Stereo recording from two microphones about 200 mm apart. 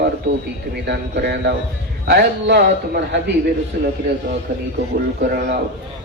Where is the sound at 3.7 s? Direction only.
45° right (ahead or behind).